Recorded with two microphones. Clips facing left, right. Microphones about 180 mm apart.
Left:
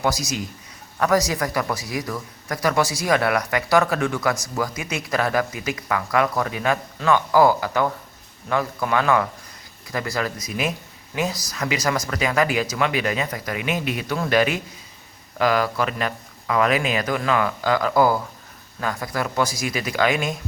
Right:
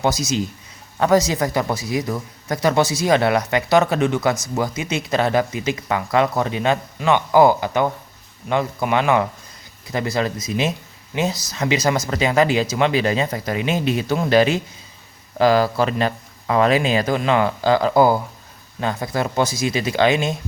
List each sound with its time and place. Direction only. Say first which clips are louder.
0.0 s speech: right 4 dB; 25° right (ahead or behind)